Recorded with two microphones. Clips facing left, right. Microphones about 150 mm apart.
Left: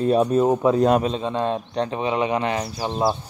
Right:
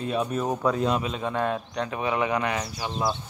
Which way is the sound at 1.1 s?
25° left (ahead or behind).